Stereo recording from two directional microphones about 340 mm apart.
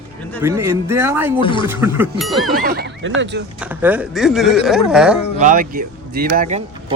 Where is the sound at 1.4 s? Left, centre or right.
Centre.